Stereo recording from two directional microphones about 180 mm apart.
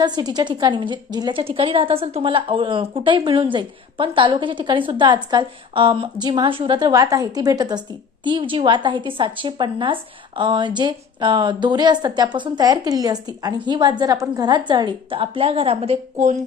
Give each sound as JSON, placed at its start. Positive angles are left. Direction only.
{"t": 0.0, "sound": "a woman's voice", "side_deg": -25}